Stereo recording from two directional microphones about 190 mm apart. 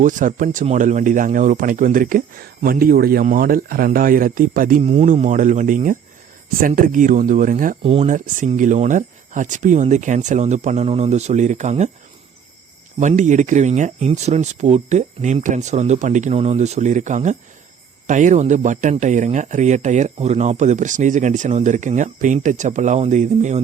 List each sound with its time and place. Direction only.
0.0 s speech: 45° right (ahead or behind)
4.8 s speech: 35° right (ahead or behind)
13.0 s speech: 40° right (ahead or behind)